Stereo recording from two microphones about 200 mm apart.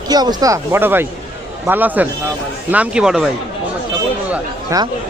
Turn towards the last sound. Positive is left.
turn(degrees=-5)  # may be behind; listen again after turning